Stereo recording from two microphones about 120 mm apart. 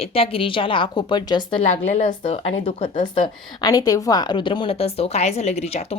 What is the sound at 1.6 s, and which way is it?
Speech, 80° left.